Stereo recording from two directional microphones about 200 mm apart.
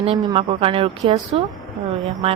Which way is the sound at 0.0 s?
25° right (ahead or behind).